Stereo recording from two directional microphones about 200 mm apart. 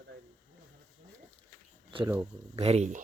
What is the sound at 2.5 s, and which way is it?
Speech, 30° right (ahead or behind).